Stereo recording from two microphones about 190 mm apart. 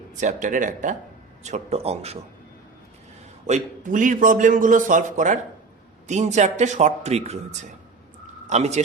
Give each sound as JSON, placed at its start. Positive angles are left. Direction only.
{"t": 0.2, "sound": "a man's voice", "side_deg": -40}
{"t": 3.4, "sound": "a man's voice", "side_deg": -40}
{"t": 8.4, "sound": "speech", "side_deg": -35}